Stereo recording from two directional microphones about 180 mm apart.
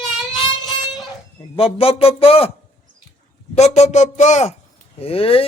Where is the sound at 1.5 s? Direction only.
30° left (ahead or behind).